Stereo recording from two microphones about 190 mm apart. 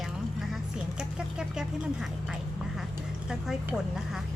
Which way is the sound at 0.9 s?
5° right (ahead or behind).